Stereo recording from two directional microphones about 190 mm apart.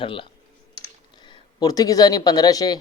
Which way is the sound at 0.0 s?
30° left (ahead or behind).